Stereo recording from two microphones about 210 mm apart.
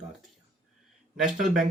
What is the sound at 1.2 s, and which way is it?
Speech, centre (ahead or behind).